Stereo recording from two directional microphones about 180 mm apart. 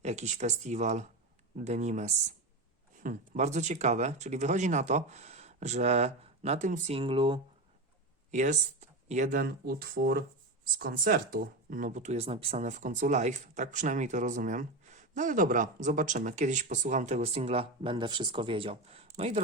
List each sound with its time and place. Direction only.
0.0 s speech: 40° right (ahead or behind)
8.3 s speech: 45° right (ahead or behind)